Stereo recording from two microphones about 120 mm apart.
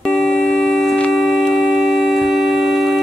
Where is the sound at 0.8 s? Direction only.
5° left (ahead or behind).